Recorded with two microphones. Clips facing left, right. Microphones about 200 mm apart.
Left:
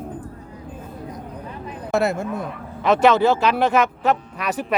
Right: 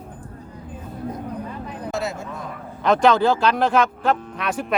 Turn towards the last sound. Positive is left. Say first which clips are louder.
# even
turn(degrees=5)  # may be behind; listen again after turning